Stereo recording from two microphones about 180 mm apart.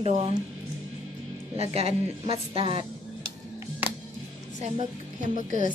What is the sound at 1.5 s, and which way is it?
A woman's voice, 35° right (ahead or behind).